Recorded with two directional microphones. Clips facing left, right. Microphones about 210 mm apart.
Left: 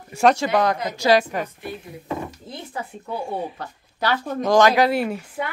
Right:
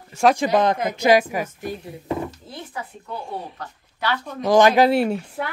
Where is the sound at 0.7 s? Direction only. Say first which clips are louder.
Right 3 dB; 55° right (ahead or behind).